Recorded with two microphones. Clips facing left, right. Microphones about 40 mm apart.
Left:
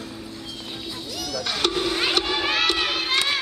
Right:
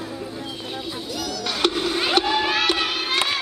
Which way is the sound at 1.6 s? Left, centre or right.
Centre.